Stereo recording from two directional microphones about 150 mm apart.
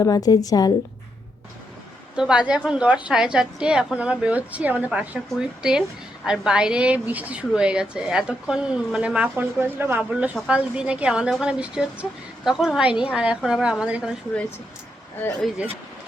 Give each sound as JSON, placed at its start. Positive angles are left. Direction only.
{"t": 0.0, "sound": "a woman's voice", "side_deg": 25}
{"t": 2.1, "sound": "a woman's voice", "side_deg": -5}
{"t": 15.4, "sound": "a woman's voice", "side_deg": 0}